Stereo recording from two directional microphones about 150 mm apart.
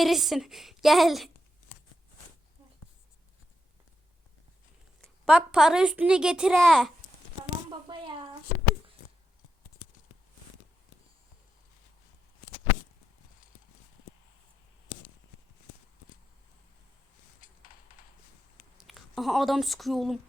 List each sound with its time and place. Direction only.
0.0 s a woman's voice: centre (ahead or behind)
4.9 s a woman's voice: 5° right (ahead or behind)
7.9 s a sound: 30° right (ahead or behind)
18.8 s speech: centre (ahead or behind)